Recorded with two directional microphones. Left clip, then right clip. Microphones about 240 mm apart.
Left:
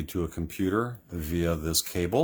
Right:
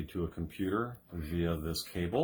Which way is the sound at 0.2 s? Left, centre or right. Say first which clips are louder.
Left 6 dB; left.